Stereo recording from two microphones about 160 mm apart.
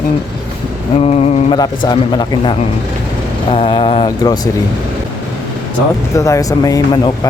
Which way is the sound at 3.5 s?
35° left (ahead or behind).